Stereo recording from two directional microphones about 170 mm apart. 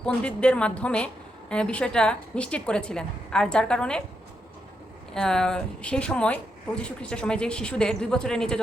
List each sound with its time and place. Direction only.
0.0 s a woman's voice: 5° left (ahead or behind)
5.1 s a woman's voice: 5° left (ahead or behind)